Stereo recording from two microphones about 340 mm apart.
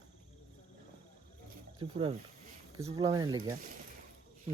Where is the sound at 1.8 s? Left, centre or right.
Centre.